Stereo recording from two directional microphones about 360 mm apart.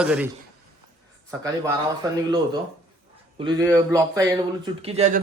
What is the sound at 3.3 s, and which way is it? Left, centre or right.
A man's voice, centre.